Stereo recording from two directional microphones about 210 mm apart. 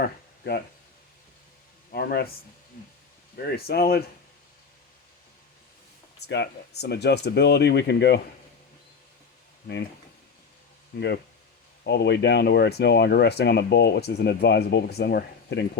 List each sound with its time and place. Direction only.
1.9 s speech: 50° left (ahead or behind)
6.1 s speech: 55° left (ahead or behind)
11.8 s speech: 50° left (ahead or behind)